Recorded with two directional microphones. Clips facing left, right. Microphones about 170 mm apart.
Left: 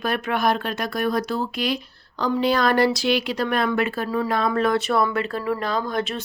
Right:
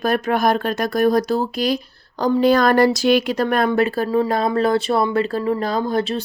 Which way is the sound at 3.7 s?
35° right (ahead or behind).